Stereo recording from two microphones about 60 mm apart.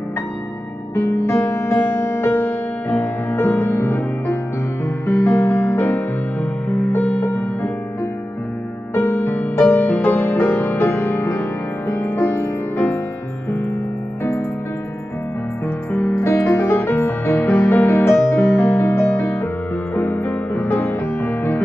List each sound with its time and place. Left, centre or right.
1.1 s music: left
2.1 s music: left
5.8 s music: left
8.9 s music: left
11.9 s music: left
16.2 s music: left
18.2 s music: left